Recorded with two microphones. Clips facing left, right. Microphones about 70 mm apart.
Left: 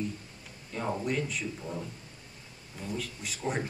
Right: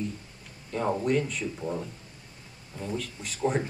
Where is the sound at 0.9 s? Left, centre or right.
Centre.